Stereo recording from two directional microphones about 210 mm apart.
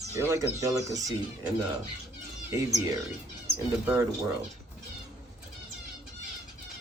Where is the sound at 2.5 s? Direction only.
15° right (ahead or behind).